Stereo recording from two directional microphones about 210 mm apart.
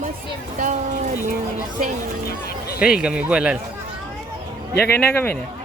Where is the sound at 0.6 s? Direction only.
35° right (ahead or behind).